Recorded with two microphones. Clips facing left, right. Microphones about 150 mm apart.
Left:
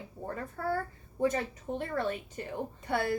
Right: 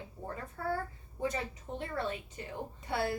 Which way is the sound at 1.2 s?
45° left (ahead or behind).